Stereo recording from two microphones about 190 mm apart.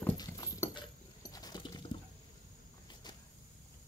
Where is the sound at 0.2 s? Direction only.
20° left (ahead or behind).